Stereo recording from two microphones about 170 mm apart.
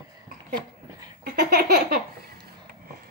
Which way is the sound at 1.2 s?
65° right (ahead or behind).